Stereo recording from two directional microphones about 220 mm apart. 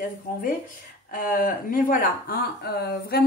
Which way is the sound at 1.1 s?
40° left (ahead or behind).